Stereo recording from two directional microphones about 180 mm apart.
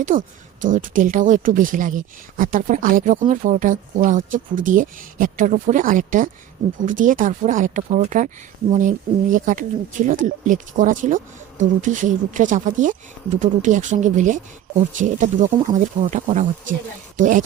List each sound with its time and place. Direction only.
0.0 s a woman's voice: 45° right (ahead or behind)